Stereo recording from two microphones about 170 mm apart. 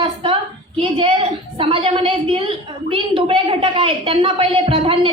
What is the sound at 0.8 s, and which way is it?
A woman's voice, 30° right (ahead or behind).